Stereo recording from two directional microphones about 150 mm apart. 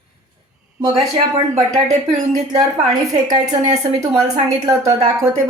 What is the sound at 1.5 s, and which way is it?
Speech, 50° right (ahead or behind).